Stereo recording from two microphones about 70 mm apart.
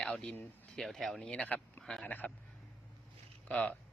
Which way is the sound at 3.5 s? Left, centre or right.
Centre.